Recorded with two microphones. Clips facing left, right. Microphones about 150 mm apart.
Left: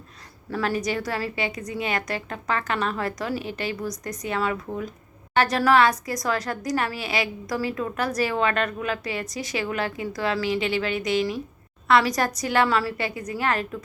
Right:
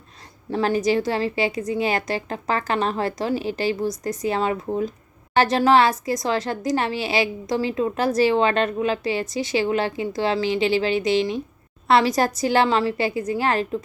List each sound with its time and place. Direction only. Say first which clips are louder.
0.5 s a woman's voice: right 6 dB; 30° right (ahead or behind)